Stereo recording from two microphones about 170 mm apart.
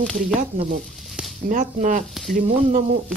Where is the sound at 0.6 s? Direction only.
50° right (ahead or behind).